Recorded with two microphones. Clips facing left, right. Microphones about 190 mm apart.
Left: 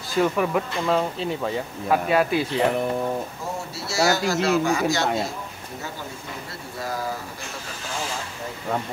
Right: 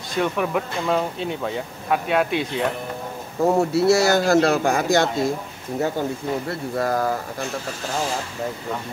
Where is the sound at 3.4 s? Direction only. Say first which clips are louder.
Right 14 dB; 60° right (ahead or behind).